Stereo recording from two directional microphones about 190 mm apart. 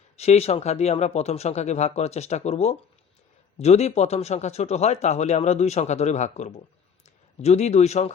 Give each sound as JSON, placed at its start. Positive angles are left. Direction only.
{"t": 0.2, "sound": "speech", "side_deg": 35}